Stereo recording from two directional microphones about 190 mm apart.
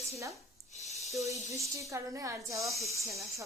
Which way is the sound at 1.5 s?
15° right (ahead or behind).